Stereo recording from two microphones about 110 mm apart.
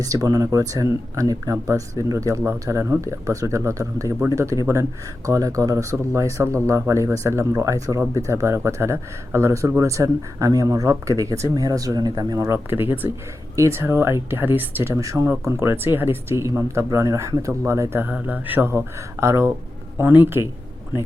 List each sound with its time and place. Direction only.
0.0 s speech: 35° right (ahead or behind)
12.5 s speech: 20° right (ahead or behind)
14.9 s speech: 30° right (ahead or behind)